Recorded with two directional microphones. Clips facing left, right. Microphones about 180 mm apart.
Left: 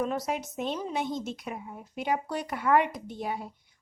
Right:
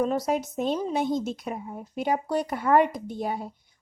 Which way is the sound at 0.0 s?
35° right (ahead or behind).